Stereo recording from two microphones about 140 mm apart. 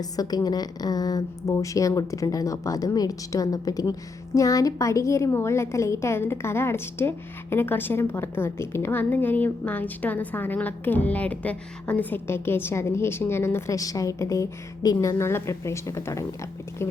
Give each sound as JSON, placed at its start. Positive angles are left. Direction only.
{"t": 0.0, "sound": "a woman's voice", "side_deg": 25}